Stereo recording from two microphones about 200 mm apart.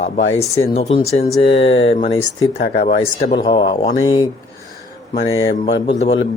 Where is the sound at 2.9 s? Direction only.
35° left (ahead or behind).